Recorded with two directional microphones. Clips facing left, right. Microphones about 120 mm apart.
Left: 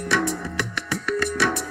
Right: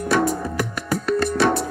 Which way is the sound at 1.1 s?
30° right (ahead or behind).